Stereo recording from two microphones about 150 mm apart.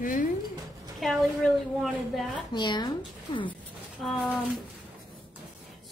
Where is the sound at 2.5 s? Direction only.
30° left (ahead or behind).